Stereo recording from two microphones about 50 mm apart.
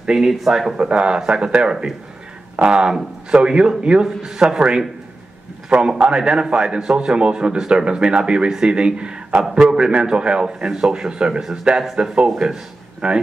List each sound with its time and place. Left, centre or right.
0.0 s speech: centre
0.7 s a man's voice: right
11.8 s speech: centre
13.0 s a man's voice: right